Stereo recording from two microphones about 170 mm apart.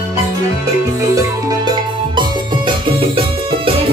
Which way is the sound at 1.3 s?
25° right (ahead or behind).